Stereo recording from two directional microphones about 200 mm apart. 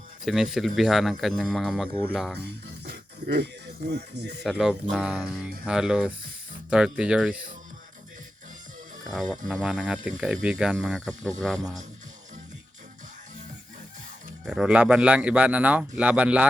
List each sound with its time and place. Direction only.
0.3 s speech: centre (ahead or behind)
2.4 s speech: 55° right (ahead or behind)
4.4 s speech: 5° right (ahead or behind)
9.5 s speech: centre (ahead or behind)
14.4 s a man's voice: 5° right (ahead or behind)